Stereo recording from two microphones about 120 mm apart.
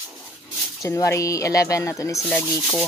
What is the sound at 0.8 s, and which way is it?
Speech, 25° left (ahead or behind).